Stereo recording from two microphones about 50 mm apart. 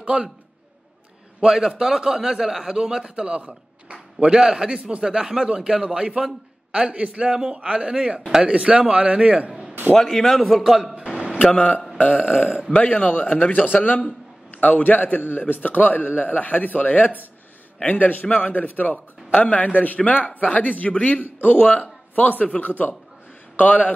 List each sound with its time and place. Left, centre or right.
0.0 s speech: right
1.4 s a man's voice: centre
9.9 s a man's voice: centre
11.3 s a man's voice: left